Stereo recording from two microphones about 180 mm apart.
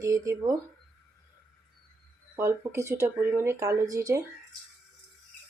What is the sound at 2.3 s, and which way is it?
Speech, 15° right (ahead or behind).